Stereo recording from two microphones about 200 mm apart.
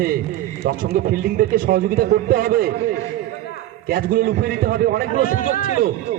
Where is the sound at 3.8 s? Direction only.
45° right (ahead or behind).